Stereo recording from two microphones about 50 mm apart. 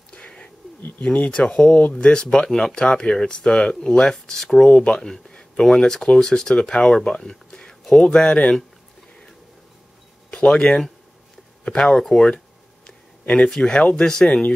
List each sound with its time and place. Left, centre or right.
1.0 s speech: left
1.3 s speech: centre
4.6 s speech: left
10.4 s speech: centre
13.2 s speech: left